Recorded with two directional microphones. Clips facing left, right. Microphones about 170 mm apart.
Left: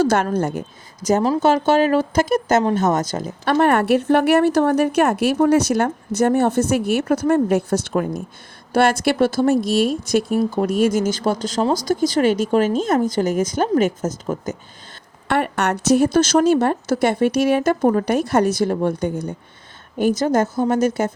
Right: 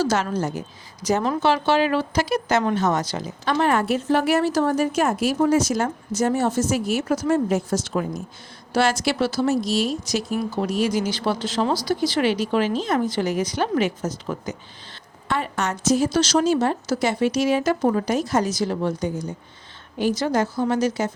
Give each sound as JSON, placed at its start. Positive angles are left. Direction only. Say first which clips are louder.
{"t": 0.0, "sound": "speech", "louder": "left 4 dB", "side_deg": 55}
{"t": 1.0, "sound": "speech", "louder": "left 4 dB", "side_deg": 40}
{"t": 15.3, "sound": "speech", "louder": "left 5 dB", "side_deg": 65}
{"t": 20.0, "sound": "speech", "louder": "left 4 dB", "side_deg": 45}